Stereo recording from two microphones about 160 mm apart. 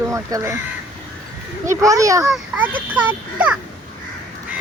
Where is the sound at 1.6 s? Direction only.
20° right (ahead or behind).